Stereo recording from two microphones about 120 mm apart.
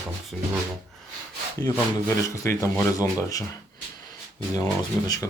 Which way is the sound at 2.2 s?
25° left (ahead or behind).